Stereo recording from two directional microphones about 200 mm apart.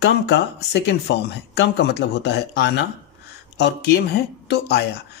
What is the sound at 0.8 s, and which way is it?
Speech, 60° left (ahead or behind).